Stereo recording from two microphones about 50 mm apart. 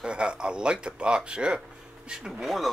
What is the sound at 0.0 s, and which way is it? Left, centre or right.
Speech, centre.